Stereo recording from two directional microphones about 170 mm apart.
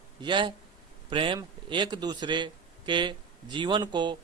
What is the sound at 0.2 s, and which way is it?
Speech, 25° right (ahead or behind).